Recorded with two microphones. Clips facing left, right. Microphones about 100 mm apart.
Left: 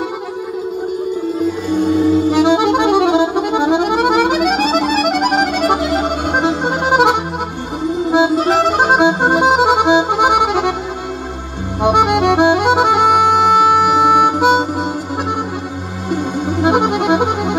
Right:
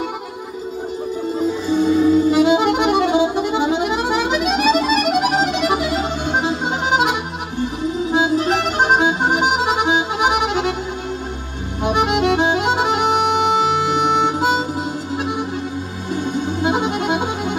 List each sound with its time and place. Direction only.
2.3 s music: 75° left (ahead or behind)
8.1 s music: 70° left (ahead or behind)
11.8 s music: 65° left (ahead or behind)
16.1 s music: 70° left (ahead or behind)